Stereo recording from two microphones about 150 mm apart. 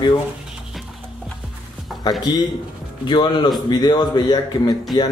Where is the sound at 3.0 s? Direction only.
30° left (ahead or behind).